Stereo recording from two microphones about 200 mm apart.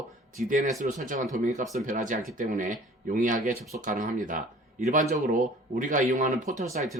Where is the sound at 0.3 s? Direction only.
40° right (ahead or behind).